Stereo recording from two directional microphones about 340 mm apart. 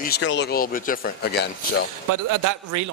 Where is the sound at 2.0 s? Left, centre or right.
Right.